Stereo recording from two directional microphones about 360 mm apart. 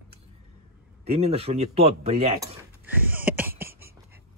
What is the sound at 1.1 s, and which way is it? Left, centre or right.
Speech, centre.